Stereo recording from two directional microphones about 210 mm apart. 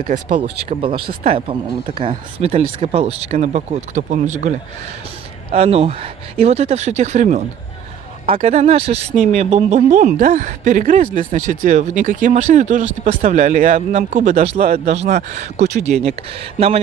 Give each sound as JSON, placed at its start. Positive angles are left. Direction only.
{"t": 0.4, "sound": "speech", "side_deg": -25}